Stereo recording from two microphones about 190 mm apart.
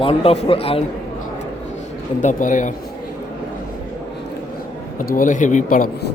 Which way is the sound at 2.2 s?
40° left (ahead or behind).